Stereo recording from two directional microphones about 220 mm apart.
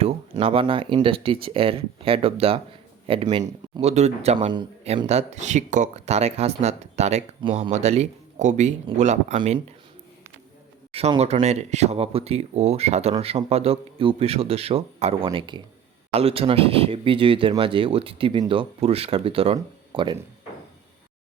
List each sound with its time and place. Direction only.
0.0 s speech: 25° right (ahead or behind)
10.9 s speech: 30° right (ahead or behind)